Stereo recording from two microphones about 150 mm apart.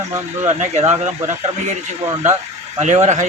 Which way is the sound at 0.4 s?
50° right (ahead or behind).